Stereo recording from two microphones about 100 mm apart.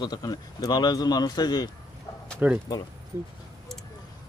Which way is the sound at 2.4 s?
15° right (ahead or behind).